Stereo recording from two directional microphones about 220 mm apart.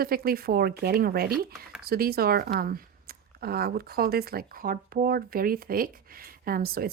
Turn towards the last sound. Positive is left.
turn(degrees=-45)  # may be behind; listen again after turning